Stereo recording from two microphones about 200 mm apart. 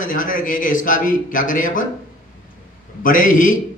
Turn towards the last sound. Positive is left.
turn(degrees=40)  # may be behind; listen again after turning